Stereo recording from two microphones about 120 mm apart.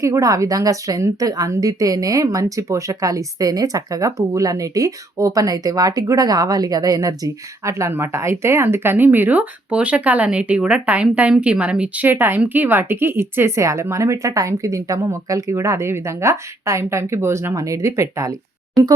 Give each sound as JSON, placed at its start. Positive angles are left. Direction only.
{"t": 0.0, "sound": "a woman's voice", "side_deg": -25}